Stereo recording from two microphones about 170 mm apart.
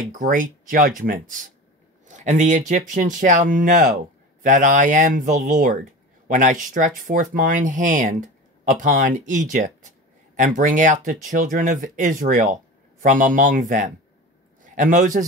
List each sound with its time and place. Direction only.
0.1 s speech: 50° right (ahead or behind)